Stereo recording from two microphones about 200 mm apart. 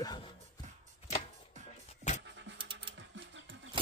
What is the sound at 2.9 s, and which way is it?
Dog, 65° right (ahead or behind).